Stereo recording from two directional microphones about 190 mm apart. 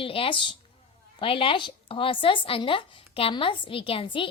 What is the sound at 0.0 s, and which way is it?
A woman's voice, 30° left (ahead or behind).